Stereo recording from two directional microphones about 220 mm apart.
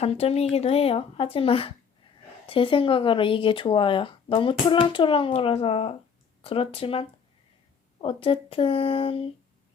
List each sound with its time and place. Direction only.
0.0 s speech: 30° left (ahead or behind)